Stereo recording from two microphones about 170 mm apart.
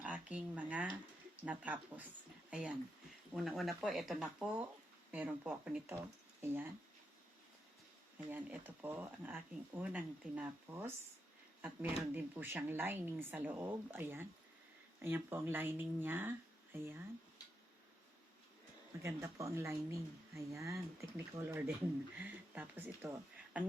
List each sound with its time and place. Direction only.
0.0 s speech: 10° right (ahead or behind)
8.3 s speech: 10° right (ahead or behind)
12.1 s speech: 10° right (ahead or behind)
19.0 s speech: 15° right (ahead or behind)